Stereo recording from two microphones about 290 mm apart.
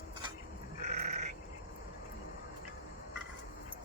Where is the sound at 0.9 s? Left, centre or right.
Right.